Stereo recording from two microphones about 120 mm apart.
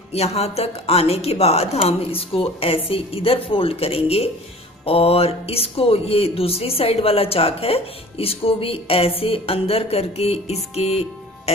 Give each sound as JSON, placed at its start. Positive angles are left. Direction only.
{"t": 0.1, "sound": "speech", "side_deg": 60}